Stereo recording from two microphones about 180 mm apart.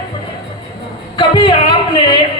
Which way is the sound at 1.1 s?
25° left (ahead or behind).